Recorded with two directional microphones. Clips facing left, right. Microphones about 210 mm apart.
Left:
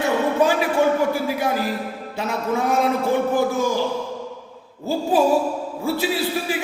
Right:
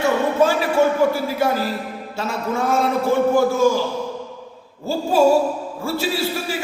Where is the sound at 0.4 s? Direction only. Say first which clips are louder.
Right 3 dB; 15° left (ahead or behind).